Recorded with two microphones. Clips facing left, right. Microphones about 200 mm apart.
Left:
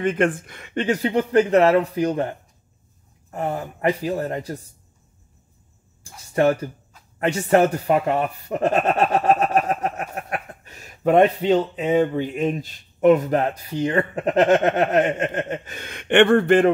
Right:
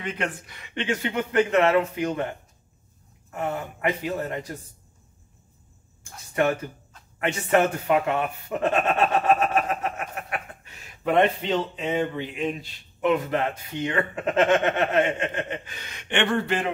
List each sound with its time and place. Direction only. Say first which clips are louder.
0.0 s speech: left 10 dB; 50° left (ahead or behind)
3.3 s speech: left 3 dB; 35° left (ahead or behind)
6.3 s speech: left 5 dB; 35° left (ahead or behind); by 16.7 s 55° left (ahead or behind)